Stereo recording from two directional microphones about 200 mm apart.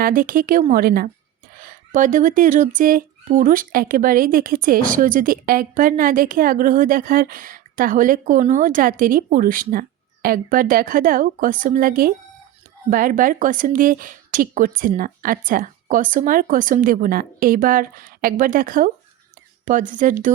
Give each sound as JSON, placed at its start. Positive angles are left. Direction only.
{"t": 0.0, "sound": "speech", "side_deg": -45}